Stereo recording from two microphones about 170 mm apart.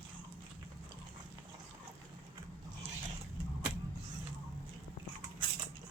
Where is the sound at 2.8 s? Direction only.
40° right (ahead or behind).